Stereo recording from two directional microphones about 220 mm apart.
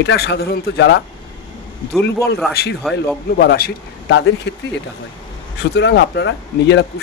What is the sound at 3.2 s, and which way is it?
A man's voice, 45° left (ahead or behind).